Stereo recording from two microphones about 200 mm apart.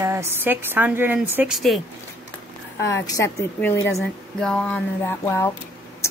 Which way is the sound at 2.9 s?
15° left (ahead or behind).